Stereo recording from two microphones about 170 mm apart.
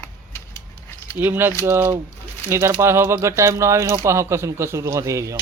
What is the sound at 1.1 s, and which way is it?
Speech, 10° right (ahead or behind).